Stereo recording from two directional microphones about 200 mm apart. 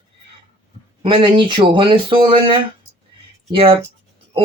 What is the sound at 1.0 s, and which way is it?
Speech, 25° right (ahead or behind).